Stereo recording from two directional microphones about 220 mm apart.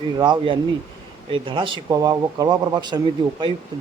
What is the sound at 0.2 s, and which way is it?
A man's voice, 20° right (ahead or behind).